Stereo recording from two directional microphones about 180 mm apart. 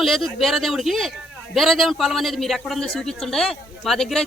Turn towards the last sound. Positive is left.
turn(degrees=0)  # may be behind; listen again after turning